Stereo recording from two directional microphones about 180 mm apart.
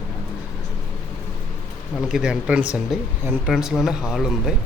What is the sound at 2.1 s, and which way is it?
Speech, 5° right (ahead or behind).